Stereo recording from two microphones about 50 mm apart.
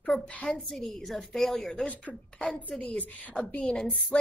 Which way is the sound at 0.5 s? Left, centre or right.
Centre.